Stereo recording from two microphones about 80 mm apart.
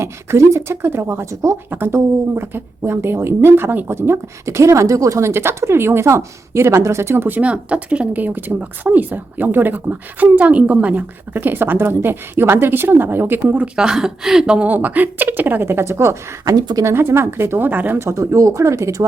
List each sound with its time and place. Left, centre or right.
0.0 s speech: right
13.7 s speech: centre; by 16.6 s right
16.6 s speech: right
16.8 s speech: right
18.1 s speech: right